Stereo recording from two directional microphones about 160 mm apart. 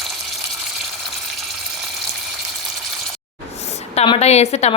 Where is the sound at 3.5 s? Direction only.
45° left (ahead or behind).